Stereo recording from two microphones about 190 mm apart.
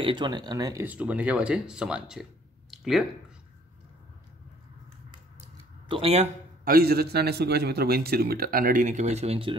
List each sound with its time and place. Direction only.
0.0 s speech: 25° right (ahead or behind)
0.8 s speech: 10° right (ahead or behind)
2.7 s a sound: centre (ahead or behind)
5.9 s speech: 30° right (ahead or behind)
6.6 s a man's voice: 50° right (ahead or behind); by 9.6 s 30° right (ahead or behind)